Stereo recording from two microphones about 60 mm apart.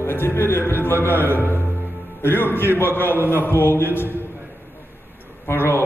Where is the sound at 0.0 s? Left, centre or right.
Left.